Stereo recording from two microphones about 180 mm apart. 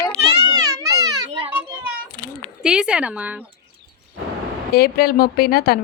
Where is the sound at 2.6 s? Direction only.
5° right (ahead or behind).